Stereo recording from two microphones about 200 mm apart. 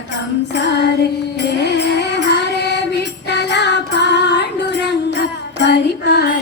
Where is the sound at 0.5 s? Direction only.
60° left (ahead or behind).